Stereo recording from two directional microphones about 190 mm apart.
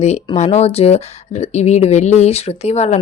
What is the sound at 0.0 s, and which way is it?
Speech, 35° left (ahead or behind).